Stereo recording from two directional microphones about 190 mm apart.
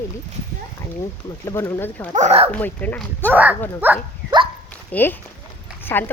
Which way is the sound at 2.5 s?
10° left (ahead or behind).